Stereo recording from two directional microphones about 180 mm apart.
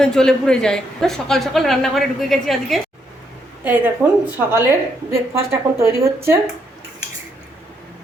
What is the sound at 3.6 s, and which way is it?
A woman's voice, 10° right (ahead or behind).